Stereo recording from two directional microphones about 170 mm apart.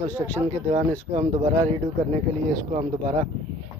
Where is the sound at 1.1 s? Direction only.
40° right (ahead or behind).